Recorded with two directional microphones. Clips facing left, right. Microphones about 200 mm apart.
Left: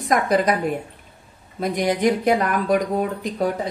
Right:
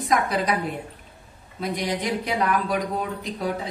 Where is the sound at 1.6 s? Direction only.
50° left (ahead or behind).